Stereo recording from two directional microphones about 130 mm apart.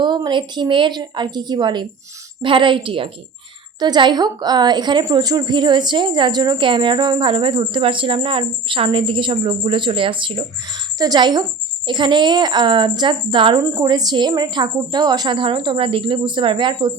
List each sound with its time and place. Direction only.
0.0 s a woman's voice: 35° right (ahead or behind)
13.6 s a woman's voice: 20° right (ahead or behind)
13.8 s a woman's voice: 35° right (ahead or behind)